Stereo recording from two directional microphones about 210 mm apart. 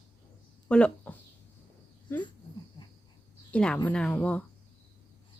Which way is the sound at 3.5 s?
5° left (ahead or behind).